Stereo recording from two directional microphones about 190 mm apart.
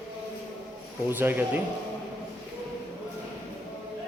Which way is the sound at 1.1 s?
10° right (ahead or behind).